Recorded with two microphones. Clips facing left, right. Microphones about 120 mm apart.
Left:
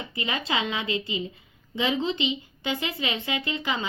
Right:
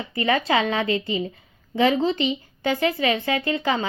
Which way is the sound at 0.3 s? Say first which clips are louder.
Right 8 dB; 45° right (ahead or behind).